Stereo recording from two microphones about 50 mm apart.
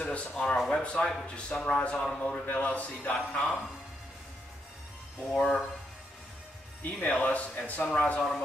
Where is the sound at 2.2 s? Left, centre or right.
Left.